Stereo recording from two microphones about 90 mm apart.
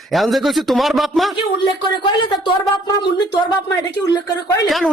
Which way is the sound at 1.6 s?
65° left (ahead or behind).